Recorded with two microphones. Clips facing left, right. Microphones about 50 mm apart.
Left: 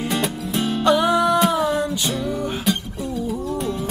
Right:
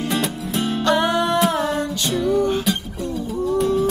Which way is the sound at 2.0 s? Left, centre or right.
Centre.